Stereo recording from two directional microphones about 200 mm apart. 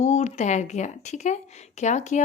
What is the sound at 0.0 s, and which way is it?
A woman's voice, 35° left (ahead or behind).